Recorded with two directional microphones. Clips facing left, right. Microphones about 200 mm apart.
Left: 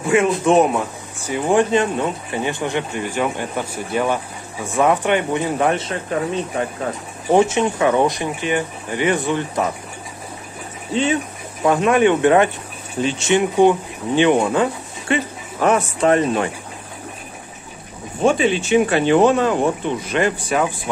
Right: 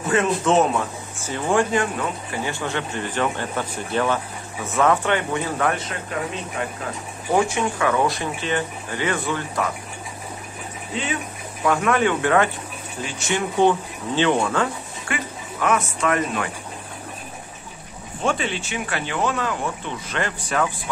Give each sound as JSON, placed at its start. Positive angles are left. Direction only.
{"t": 0.0, "sound": "speech", "side_deg": 10}
{"t": 7.3, "sound": "speech", "side_deg": 20}
{"t": 11.6, "sound": "speech", "side_deg": 20}
{"t": 18.2, "sound": "speech", "side_deg": 15}